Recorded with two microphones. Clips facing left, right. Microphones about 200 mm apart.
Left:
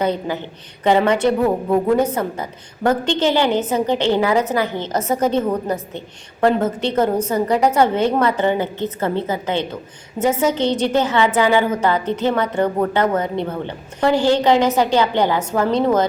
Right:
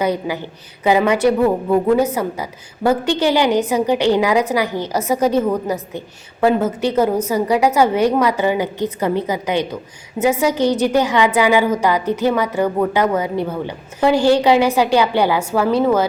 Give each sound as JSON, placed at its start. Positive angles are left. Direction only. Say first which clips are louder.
{"t": 0.0, "sound": "a woman's voice", "louder": "right 1 dB", "side_deg": -10}